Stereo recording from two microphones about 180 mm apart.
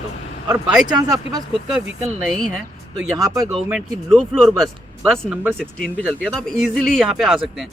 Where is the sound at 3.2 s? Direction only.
20° right (ahead or behind).